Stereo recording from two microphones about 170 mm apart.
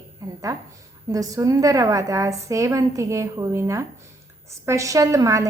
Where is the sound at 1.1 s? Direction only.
20° right (ahead or behind).